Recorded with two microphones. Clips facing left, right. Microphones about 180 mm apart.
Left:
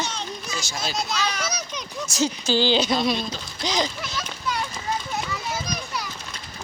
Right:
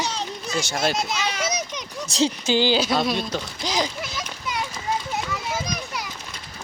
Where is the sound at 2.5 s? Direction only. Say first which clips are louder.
Even; 10° right (ahead or behind).